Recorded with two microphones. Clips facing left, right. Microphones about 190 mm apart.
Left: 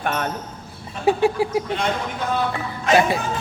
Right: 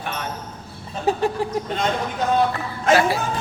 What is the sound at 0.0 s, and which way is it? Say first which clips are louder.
Basketball bounce: left 6 dB; 55° left (ahead or behind).